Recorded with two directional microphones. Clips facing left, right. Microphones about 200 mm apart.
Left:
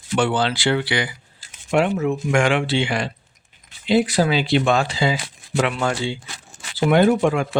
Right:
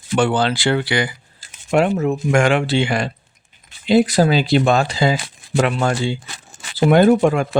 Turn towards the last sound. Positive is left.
turn(degrees=-40)  # may be behind; listen again after turning